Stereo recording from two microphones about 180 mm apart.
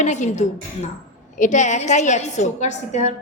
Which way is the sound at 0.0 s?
40° left (ahead or behind).